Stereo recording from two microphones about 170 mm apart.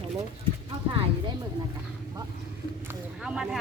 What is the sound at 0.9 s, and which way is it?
Speech, 30° right (ahead or behind).